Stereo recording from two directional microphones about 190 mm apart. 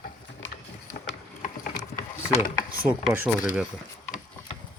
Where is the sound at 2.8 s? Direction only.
5° right (ahead or behind).